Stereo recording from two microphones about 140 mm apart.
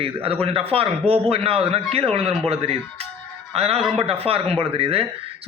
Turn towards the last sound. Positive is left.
turn(degrees=-40)  # may be behind; listen again after turning